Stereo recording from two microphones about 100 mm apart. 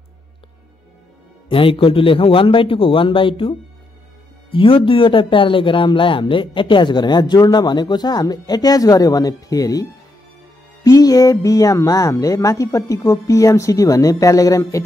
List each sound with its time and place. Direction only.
1.5 s a man's voice: 60° left (ahead or behind); by 14.6 s 35° left (ahead or behind)